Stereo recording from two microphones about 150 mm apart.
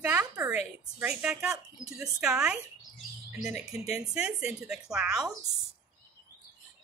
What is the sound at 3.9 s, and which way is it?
Speech, 5° right (ahead or behind).